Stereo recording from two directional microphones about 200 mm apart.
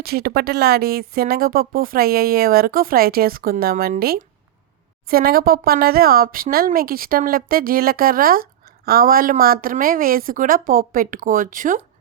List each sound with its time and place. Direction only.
0.0 s speech: 50° right (ahead or behind)